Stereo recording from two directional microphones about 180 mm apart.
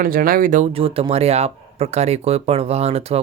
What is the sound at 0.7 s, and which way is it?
Speech, 30° right (ahead or behind).